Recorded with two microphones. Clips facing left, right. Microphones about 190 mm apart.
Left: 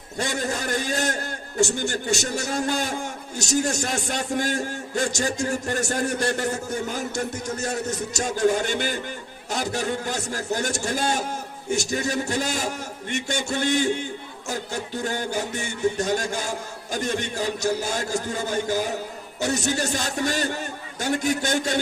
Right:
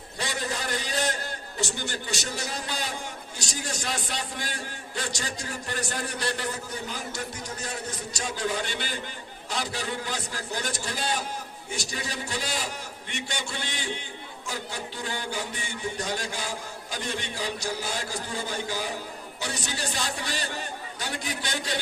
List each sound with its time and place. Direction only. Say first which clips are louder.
0.2 s a man's voice: left 5 dB; 45° left (ahead or behind)